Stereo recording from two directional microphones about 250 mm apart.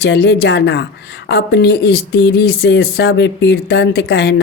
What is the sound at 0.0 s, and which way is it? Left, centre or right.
Speech, left.